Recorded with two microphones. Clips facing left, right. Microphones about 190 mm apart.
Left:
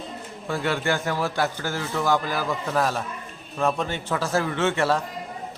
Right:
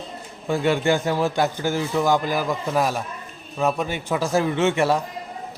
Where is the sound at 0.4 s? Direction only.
15° right (ahead or behind).